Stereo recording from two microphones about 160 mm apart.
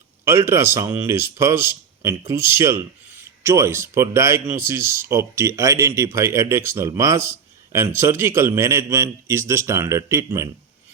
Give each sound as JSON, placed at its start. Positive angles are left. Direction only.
{"t": 0.3, "sound": "speech", "side_deg": -15}